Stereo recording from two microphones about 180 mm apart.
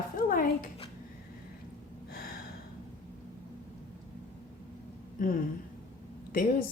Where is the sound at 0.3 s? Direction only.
50° left (ahead or behind).